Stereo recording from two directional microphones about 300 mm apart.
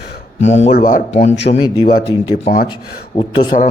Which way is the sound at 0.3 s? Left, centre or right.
Left.